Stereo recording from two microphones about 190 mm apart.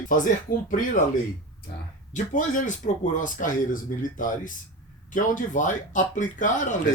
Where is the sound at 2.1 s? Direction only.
40° left (ahead or behind).